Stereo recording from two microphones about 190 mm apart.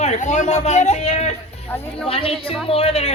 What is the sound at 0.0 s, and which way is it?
Speech, 40° left (ahead or behind).